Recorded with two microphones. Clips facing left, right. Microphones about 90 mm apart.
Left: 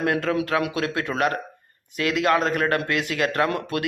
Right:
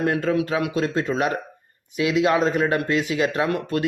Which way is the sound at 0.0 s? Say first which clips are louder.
Right 1 dB; 90° left.